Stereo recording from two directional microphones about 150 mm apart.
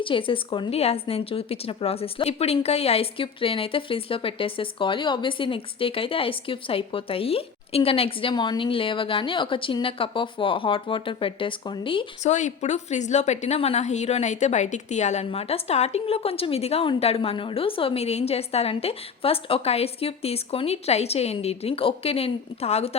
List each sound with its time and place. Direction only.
0.0 s a woman's voice: 35° left (ahead or behind)
12.2 s a woman's voice: 50° left (ahead or behind)